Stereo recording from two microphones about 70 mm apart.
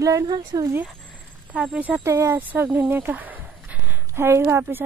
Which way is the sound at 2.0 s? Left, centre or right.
Right.